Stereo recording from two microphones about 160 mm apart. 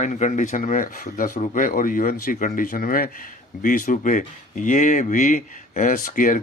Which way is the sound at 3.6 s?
55° left (ahead or behind).